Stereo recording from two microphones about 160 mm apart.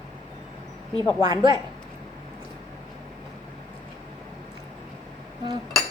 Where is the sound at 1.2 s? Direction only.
25° right (ahead or behind).